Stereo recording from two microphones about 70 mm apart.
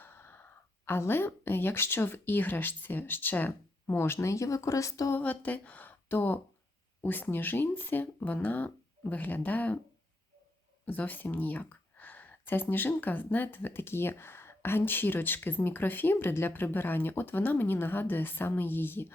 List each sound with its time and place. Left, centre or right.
0.0 s speech: left
5.1 s speech: left
10.8 s speech: left